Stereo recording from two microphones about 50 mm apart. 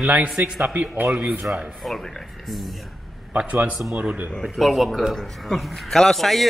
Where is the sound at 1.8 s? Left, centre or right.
Centre.